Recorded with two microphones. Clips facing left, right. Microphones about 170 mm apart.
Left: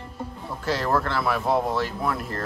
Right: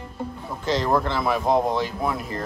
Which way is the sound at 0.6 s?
5° left (ahead or behind).